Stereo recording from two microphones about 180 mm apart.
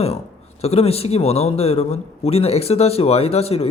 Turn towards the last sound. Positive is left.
turn(degrees=35)  # may be behind; listen again after turning